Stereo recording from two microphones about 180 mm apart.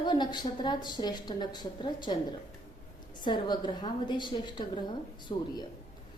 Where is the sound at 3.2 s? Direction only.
25° left (ahead or behind).